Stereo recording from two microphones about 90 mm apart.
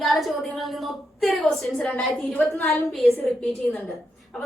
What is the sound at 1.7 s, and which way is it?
A woman's voice, 15° left (ahead or behind).